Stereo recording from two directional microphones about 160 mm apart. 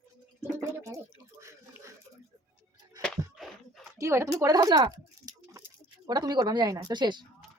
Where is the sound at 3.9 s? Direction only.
20° right (ahead or behind).